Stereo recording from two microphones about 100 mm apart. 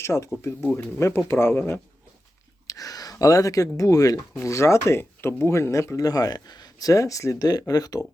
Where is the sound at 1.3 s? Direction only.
25° left (ahead or behind).